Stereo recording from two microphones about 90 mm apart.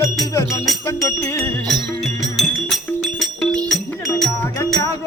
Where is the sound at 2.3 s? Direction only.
5° left (ahead or behind).